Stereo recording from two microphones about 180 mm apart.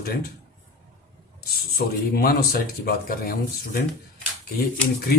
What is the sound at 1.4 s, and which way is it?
Speech, 60° left (ahead or behind).